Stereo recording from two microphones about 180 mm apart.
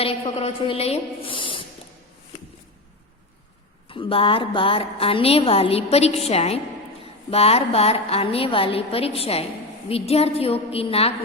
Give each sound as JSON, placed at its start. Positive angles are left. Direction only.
{"t": 0.0, "sound": "a woman's voice", "side_deg": 30}
{"t": 3.8, "sound": "a woman's voice", "side_deg": 30}